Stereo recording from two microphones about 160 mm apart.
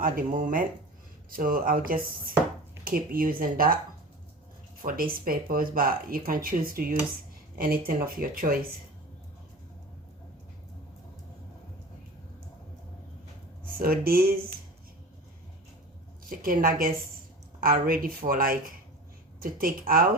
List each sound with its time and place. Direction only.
0.0 s speech: 60° right (ahead or behind)
4.8 s speech: 65° right (ahead or behind)
13.7 s speech: 65° right (ahead or behind)
16.2 s speech: 60° right (ahead or behind)